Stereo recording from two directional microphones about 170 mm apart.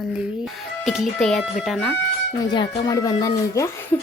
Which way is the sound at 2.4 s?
30° left (ahead or behind).